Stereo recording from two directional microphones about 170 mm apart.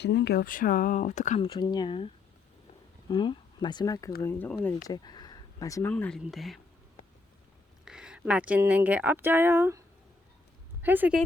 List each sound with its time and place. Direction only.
0.0 s speech: 85° left; by 1.4 s 45° left (ahead or behind)
1.4 s speech: 25° left (ahead or behind)
3.1 s speech: 25° left (ahead or behind); by 4.5 s 10° left (ahead or behind)
4.9 s speech: 25° left (ahead or behind)
5.9 s speech: 5° left (ahead or behind)
7.9 s speech: 5° right (ahead or behind)
10.8 s speech: 10° right (ahead or behind)